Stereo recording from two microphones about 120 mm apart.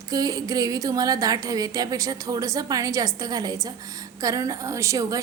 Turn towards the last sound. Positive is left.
turn(degrees=-25)  # may be behind; listen again after turning